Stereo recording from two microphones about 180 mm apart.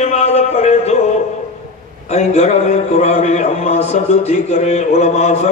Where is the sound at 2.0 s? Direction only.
40° left (ahead or behind).